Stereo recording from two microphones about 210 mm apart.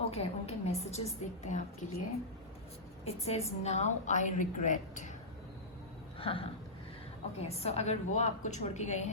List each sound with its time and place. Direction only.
0.0 s a woman's voice: 30° left (ahead or behind)
3.0 s a woman's voice: 30° left (ahead or behind)
6.1 s a sound: 25° left (ahead or behind)
7.3 s a woman's voice: 30° left (ahead or behind)